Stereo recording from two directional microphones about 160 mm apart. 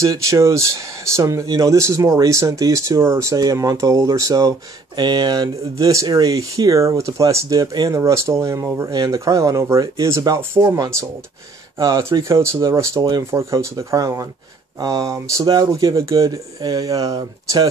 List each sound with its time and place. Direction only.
0.0 s speech: 20° right (ahead or behind)